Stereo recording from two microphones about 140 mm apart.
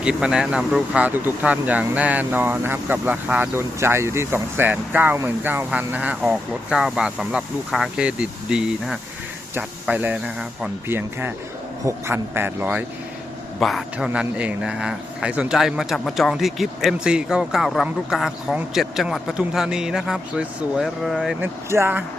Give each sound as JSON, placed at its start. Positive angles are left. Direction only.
{"t": 0.0, "sound": "speech", "side_deg": -5}
{"t": 13.6, "sound": "speech", "side_deg": 0}
{"t": 21.4, "sound": "speech", "side_deg": -15}